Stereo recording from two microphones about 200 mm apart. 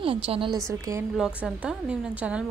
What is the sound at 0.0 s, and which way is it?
Speech, 25° right (ahead or behind).